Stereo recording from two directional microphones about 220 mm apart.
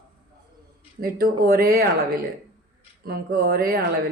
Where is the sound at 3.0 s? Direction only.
45° right (ahead or behind).